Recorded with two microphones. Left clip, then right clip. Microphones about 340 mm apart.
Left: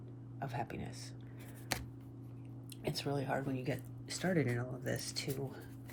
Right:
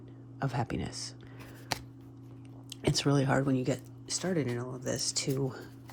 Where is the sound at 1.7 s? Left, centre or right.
Centre.